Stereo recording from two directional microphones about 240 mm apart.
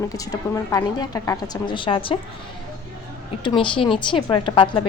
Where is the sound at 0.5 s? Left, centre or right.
Centre.